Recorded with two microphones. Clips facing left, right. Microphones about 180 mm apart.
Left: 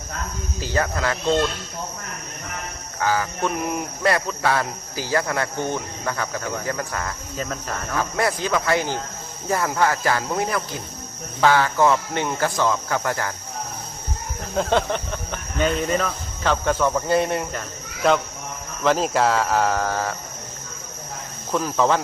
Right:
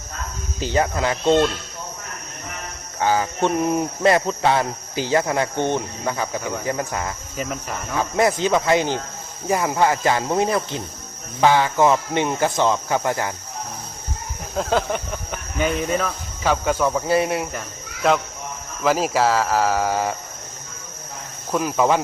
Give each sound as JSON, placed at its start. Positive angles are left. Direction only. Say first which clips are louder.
{"t": 0.6, "sound": "speech", "louder": "right 3 dB", "side_deg": -20}
{"t": 3.0, "sound": "speech", "louder": "right 3 dB", "side_deg": -25}
{"t": 8.1, "sound": "speech", "louder": "right 6 dB", "side_deg": -25}
{"t": 14.5, "sound": "speech", "louder": "even", "side_deg": 0}
{"t": 21.5, "sound": "speech", "louder": "right 1 dB", "side_deg": -10}